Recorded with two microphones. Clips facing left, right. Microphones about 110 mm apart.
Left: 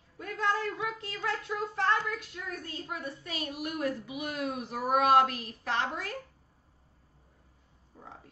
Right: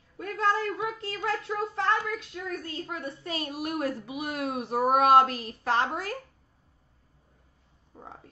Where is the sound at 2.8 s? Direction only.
30° right (ahead or behind).